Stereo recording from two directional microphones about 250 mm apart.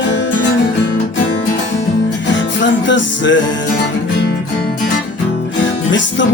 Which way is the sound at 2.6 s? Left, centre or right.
Left.